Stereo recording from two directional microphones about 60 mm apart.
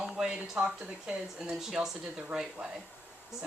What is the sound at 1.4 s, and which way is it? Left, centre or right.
Speech, centre.